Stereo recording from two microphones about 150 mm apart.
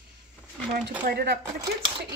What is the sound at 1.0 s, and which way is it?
Speech, 90° right.